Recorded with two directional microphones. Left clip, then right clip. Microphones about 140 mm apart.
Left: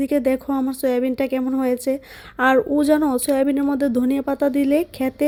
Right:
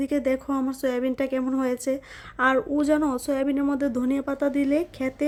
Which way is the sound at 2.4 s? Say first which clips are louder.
Left 5 dB; 30° left (ahead or behind).